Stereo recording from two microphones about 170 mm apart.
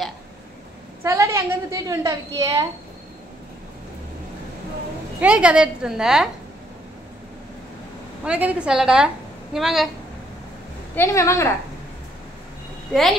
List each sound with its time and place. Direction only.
1.0 s a woman's voice: 15° right (ahead or behind)
5.2 s a woman's voice: 5° right (ahead or behind)
8.3 s a woman's voice: 10° right (ahead or behind)
11.0 s a woman's voice: 15° left (ahead or behind)